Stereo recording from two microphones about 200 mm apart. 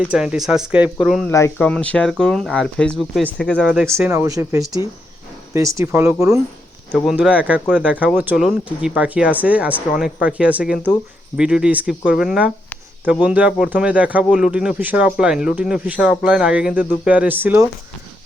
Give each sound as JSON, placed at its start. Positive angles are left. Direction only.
{"t": 0.0, "sound": "speech", "side_deg": -5}
{"t": 1.3, "sound": "speech", "side_deg": 15}
{"t": 3.8, "sound": "speech", "side_deg": -15}
{"t": 6.9, "sound": "speech", "side_deg": 0}